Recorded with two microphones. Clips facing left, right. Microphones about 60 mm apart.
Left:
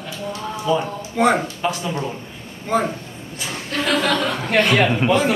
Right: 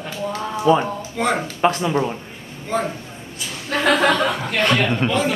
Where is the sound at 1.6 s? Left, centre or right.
Right.